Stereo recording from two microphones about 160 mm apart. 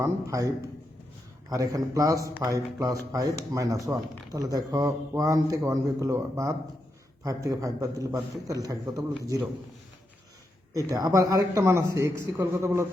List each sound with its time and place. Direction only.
0.0 s speech: 20° right (ahead or behind)
1.5 s speech: 20° right (ahead or behind)
10.8 s speech: 20° right (ahead or behind)